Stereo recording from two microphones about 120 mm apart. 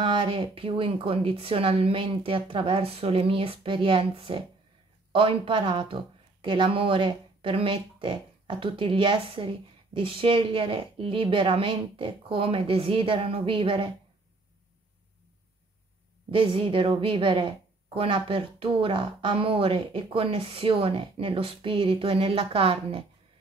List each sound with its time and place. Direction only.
0.0 s speech: 45° right (ahead or behind)
16.3 s speech: 50° right (ahead or behind)